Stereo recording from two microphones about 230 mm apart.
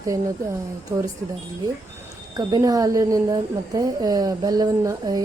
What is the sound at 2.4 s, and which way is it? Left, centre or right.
A woman's voice, centre.